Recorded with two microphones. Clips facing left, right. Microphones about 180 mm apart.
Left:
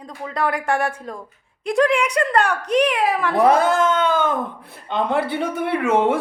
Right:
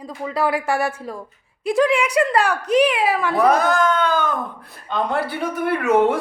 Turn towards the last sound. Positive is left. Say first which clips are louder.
# right 1 dB
turn(degrees=25)  # may be behind; listen again after turning